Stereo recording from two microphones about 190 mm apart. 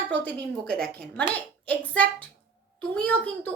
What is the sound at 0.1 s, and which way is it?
Speech, 10° left (ahead or behind).